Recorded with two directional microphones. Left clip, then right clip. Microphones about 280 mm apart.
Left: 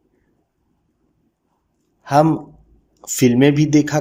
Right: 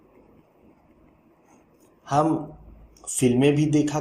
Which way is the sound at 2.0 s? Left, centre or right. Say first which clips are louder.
Left 7 dB; left.